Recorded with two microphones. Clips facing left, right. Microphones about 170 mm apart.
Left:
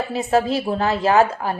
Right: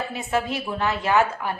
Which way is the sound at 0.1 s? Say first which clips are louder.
Left 7 dB; 35° left (ahead or behind).